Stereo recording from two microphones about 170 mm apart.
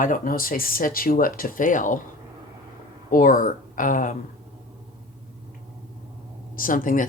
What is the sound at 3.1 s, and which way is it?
Speech, 55° left (ahead or behind).